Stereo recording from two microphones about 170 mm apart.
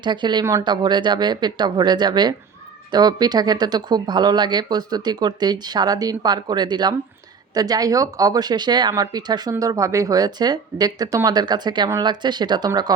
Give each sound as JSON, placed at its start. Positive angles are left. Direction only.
{"t": 0.0, "sound": "speech", "side_deg": -25}